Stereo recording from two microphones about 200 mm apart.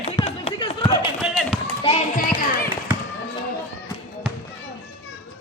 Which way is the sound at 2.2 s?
45° left (ahead or behind).